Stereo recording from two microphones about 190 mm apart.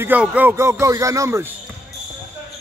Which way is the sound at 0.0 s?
10° right (ahead or behind).